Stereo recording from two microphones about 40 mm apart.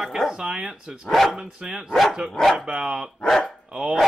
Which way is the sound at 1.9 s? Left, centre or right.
Centre.